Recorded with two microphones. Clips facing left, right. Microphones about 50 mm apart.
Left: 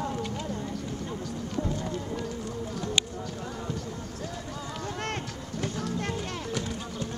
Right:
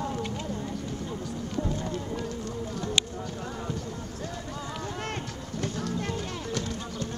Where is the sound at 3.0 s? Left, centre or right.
Left.